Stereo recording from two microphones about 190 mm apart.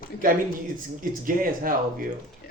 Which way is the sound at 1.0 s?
45° right (ahead or behind).